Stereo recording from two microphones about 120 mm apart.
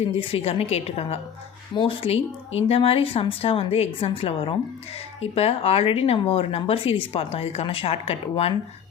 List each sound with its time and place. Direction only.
0.2 s speech: 55° left (ahead or behind)